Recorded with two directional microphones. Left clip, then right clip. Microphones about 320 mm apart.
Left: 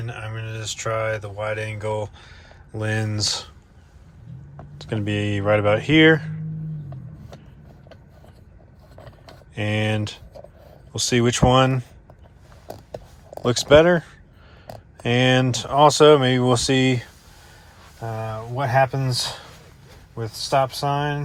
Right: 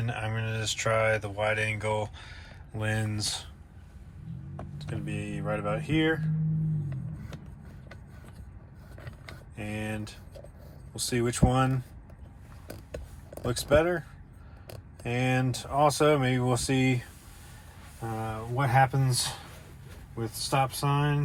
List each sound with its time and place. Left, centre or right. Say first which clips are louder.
0.0 s speech: even; centre
4.8 s speech: left 13 dB; left
9.6 s speech: left 12 dB; left
13.4 s speech: left 10 dB; left
15.0 s speech: left 11 dB; left
18.5 s speech: left 5 dB; left